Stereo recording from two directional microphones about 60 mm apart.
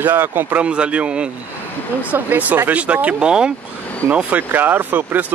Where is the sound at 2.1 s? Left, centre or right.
Right.